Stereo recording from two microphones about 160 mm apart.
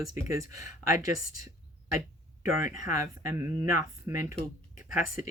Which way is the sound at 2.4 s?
20° right (ahead or behind).